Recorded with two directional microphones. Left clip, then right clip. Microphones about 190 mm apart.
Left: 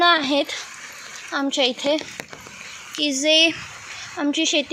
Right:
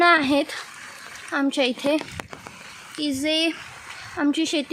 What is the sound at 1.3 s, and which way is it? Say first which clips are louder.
Speech: left 1 dB; 25° right (ahead or behind).